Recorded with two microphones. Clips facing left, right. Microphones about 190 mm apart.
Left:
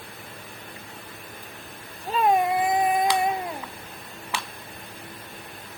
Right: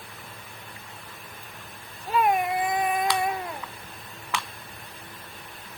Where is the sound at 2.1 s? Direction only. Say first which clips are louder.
Left 2 dB; 25° left (ahead or behind).